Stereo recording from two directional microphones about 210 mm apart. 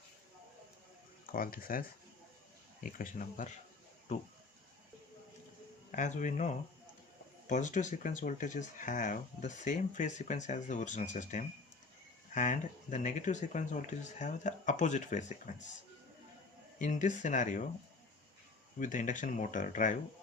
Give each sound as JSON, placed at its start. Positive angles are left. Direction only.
{"t": 1.3, "sound": "speech", "side_deg": 40}
{"t": 2.8, "sound": "speech", "side_deg": 40}
{"t": 5.9, "sound": "speech", "side_deg": 35}
{"t": 16.7, "sound": "speech", "side_deg": 35}
{"t": 18.8, "sound": "speech", "side_deg": 35}